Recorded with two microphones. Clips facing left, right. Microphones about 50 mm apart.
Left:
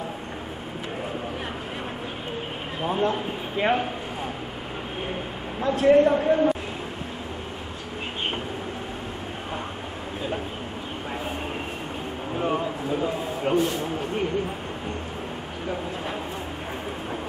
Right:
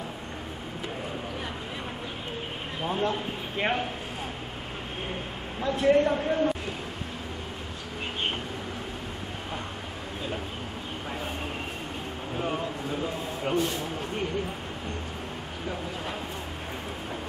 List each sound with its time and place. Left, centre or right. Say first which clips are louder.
2.8 s a man's voice: left 4 dB; centre
5.6 s a man's voice: left 5 dB; centre
12.4 s a sound: left 5 dB; centre